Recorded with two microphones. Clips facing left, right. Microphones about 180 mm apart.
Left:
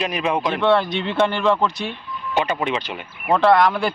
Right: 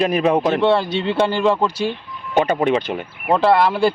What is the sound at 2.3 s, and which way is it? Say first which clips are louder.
Speech: right 5 dB; 50° right (ahead or behind).